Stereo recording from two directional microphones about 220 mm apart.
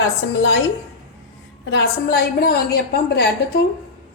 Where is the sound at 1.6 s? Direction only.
50° left (ahead or behind).